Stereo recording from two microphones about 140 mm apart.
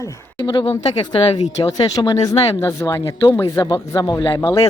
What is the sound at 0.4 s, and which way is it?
Speech, 40° left (ahead or behind).